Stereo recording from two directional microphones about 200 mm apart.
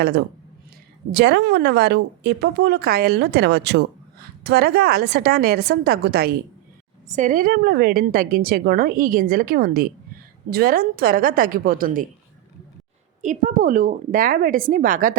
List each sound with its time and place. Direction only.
1.1 s a woman's voice: 55° right (ahead or behind)
7.2 s a woman's voice: 40° right (ahead or behind)
13.2 s a woman's voice: 45° right (ahead or behind)